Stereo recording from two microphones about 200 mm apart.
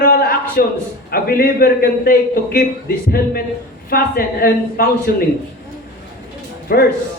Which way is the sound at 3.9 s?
50° left (ahead or behind).